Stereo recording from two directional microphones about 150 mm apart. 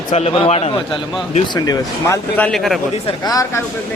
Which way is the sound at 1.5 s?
25° left (ahead or behind).